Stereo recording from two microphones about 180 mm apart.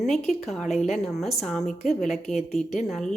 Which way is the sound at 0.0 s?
Centre (ahead or behind).